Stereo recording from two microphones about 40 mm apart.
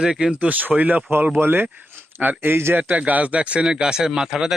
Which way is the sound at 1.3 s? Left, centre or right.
Right.